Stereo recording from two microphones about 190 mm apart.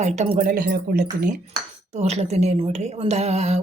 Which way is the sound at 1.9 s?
35° right (ahead or behind).